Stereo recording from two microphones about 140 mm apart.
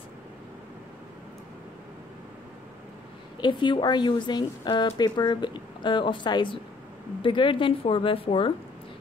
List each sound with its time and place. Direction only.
3.3 s a woman's voice: 35° left (ahead or behind)